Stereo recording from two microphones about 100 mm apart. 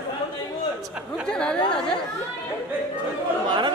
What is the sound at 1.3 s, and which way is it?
Speech, 10° left (ahead or behind).